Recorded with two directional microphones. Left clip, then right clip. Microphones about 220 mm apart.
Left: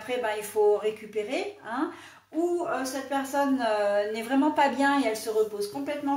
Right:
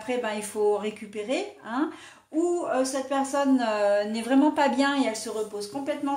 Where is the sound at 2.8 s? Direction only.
40° right (ahead or behind).